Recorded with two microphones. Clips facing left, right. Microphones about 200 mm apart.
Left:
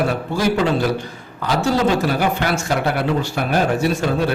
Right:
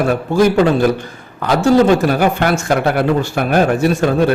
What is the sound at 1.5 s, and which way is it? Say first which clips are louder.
Speech: right 7 dB; 50° right (ahead or behind).